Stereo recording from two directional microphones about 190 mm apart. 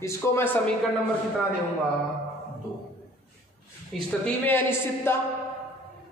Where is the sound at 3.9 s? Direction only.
10° left (ahead or behind).